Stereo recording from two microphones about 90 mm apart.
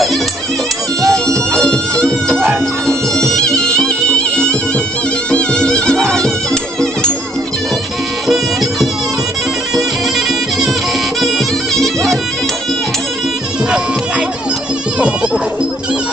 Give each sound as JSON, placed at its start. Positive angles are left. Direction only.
{"t": 1.0, "sound": "music", "side_deg": 10}
{"t": 8.3, "sound": "music", "side_deg": 0}
{"t": 15.0, "sound": "music", "side_deg": -10}